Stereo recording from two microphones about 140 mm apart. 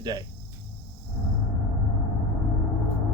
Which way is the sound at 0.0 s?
30° right (ahead or behind).